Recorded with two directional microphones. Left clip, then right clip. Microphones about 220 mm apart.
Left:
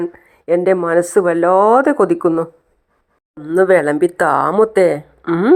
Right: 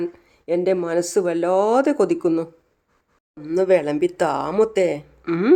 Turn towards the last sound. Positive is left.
turn(degrees=5)  # may be behind; listen again after turning